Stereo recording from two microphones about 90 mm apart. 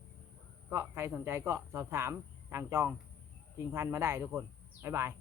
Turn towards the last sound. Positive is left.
turn(degrees=-30)  # may be behind; listen again after turning